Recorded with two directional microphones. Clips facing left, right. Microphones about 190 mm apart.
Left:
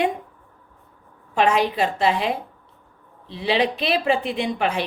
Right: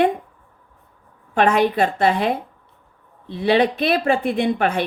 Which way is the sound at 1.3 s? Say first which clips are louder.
Right 3 dB; 55° right (ahead or behind).